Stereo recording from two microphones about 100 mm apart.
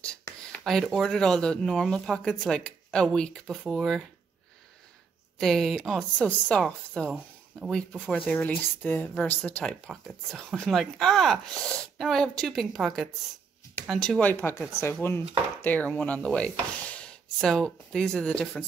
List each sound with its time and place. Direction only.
0.0 s a sound: 10° left (ahead or behind)
0.9 s speech: 5° left (ahead or behind)
5.4 s speech: 5° left (ahead or behind)
14.2 s speech: 25° left (ahead or behind)